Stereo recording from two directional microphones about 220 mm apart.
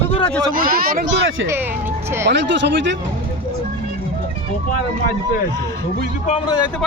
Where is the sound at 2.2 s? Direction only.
50° right (ahead or behind).